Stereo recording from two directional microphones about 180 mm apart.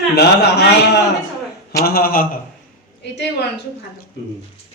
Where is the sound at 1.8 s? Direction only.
55° left (ahead or behind).